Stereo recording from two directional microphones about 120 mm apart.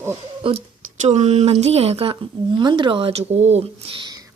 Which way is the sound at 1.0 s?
65° right (ahead or behind).